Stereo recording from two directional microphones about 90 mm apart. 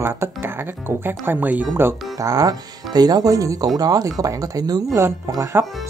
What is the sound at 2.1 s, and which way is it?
Speech, 40° right (ahead or behind).